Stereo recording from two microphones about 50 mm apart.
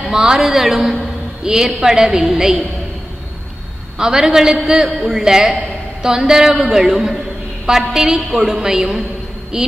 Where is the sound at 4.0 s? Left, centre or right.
Centre.